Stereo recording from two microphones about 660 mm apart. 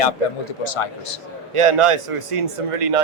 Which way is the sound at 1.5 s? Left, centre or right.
Right.